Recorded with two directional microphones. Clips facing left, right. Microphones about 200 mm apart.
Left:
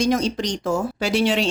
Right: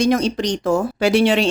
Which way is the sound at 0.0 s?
60° right (ahead or behind).